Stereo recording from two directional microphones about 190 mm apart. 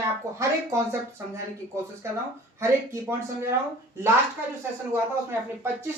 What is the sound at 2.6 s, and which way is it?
Speech, 15° right (ahead or behind).